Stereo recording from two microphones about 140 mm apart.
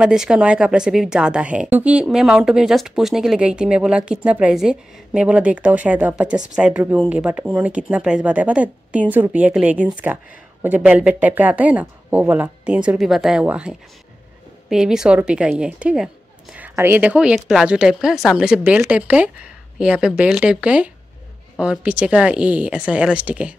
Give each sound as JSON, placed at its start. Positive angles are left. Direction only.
{"t": 0.0, "sound": "a woman's voice", "side_deg": -5}